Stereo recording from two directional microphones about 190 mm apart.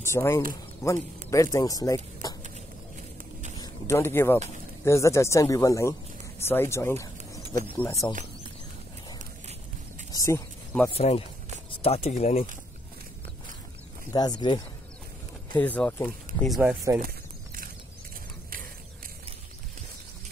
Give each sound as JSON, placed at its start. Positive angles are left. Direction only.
{"t": 0.0, "sound": "speech", "side_deg": 15}
{"t": 3.5, "sound": "a sound", "side_deg": 15}
{"t": 4.8, "sound": "speech", "side_deg": 15}
{"t": 10.1, "sound": "a sound", "side_deg": 15}
{"t": 11.0, "sound": "speech", "side_deg": 35}
{"t": 14.1, "sound": "speech", "side_deg": 20}
{"t": 15.5, "sound": "speech", "side_deg": 10}